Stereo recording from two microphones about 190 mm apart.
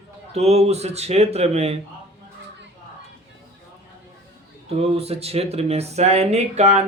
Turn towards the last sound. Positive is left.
turn(degrees=-35)  # may be behind; listen again after turning